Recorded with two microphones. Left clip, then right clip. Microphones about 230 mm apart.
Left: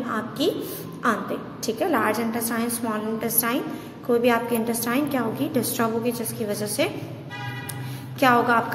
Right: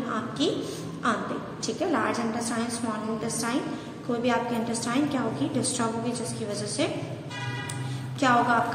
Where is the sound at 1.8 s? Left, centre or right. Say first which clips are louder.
Left 4 dB; left.